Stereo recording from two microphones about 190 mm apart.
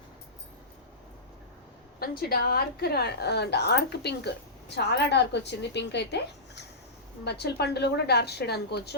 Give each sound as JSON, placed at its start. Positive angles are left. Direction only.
{"t": 2.0, "sound": "a woman's voice", "side_deg": 55}